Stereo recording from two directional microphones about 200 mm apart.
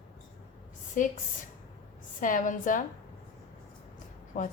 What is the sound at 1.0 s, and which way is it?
Speech, 40° left (ahead or behind).